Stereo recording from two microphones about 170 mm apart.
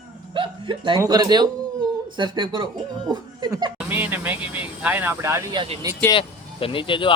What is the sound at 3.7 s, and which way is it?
Speech, 10° right (ahead or behind).